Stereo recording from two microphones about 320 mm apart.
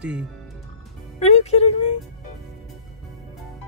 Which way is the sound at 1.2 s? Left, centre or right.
Centre.